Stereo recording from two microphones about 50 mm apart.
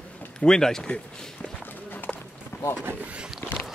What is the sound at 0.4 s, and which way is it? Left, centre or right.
Speech, centre.